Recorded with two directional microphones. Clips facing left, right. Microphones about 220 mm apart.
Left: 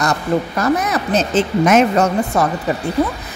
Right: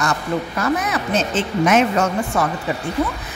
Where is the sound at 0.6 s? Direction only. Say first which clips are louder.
Left 3 dB; 40° left (ahead or behind).